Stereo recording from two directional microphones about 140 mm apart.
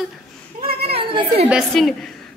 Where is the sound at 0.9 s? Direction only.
40° right (ahead or behind).